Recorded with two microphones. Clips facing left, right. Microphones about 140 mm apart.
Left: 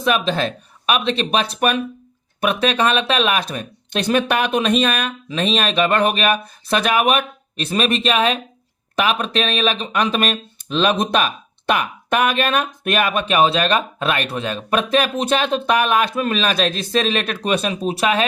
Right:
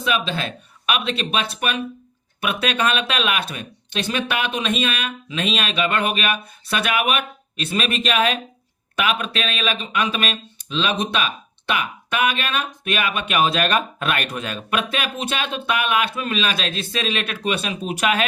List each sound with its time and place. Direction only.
0.0 s speech: 45° left (ahead or behind)